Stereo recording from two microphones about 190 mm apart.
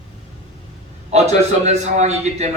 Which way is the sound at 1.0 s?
35° right (ahead or behind).